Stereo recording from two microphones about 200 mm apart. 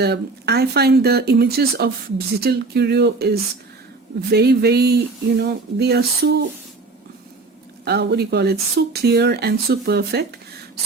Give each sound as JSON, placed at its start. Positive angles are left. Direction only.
{"t": 0.0, "sound": "speech", "side_deg": -55}
{"t": 7.9, "sound": "speech", "side_deg": -55}